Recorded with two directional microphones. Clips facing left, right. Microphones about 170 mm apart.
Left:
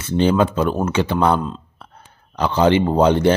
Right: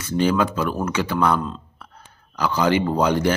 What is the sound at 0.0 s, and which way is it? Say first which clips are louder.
A man's voice: left 3 dB; 25° left (ahead or behind).